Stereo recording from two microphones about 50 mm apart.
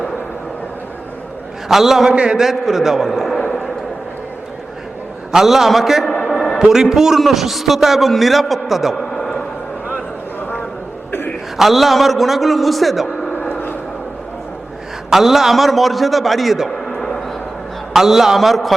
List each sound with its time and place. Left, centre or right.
1.6 s a man's voice: centre
2.1 s a man's voice: centre
2.4 s a man's voice: centre
5.3 s a man's voice: centre
11.5 s a man's voice: centre
15.1 s a man's voice: centre
17.9 s a man's voice: centre